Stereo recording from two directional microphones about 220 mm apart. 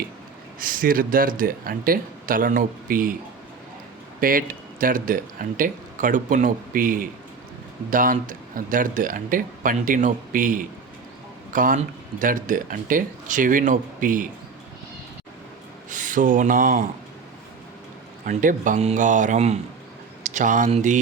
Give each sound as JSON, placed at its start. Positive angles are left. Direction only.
{"t": 0.6, "sound": "speech", "side_deg": -40}
{"t": 4.2, "sound": "speech", "side_deg": -40}
{"t": 15.9, "sound": "speech", "side_deg": -35}
{"t": 18.3, "sound": "speech", "side_deg": -35}